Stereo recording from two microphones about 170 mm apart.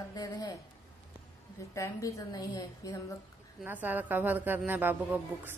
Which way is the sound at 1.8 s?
20° left (ahead or behind).